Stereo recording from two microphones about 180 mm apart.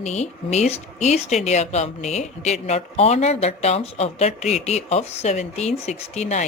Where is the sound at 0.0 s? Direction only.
40° left (ahead or behind).